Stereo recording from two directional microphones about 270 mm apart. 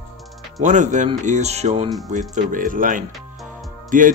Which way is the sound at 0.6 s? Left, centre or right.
Right.